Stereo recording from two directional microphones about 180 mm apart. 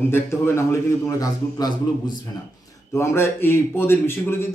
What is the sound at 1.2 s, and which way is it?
A man's voice, 20° left (ahead or behind).